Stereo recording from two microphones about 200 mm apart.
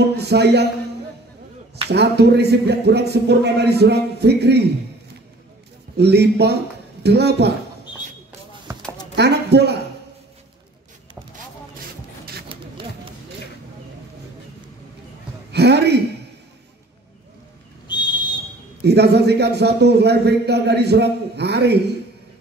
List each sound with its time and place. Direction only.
0.2 s a man's voice: 55° right (ahead or behind)
1.9 s a man's voice: 55° right (ahead or behind)
5.9 s a man's voice: 55° right (ahead or behind)
8.7 s a sound: 15° right (ahead or behind)
9.1 s a man's voice: 55° right (ahead or behind)
15.5 s speech: 55° right (ahead or behind)
17.8 s whistle: 20° left (ahead or behind)
18.8 s a man's voice: 55° right (ahead or behind)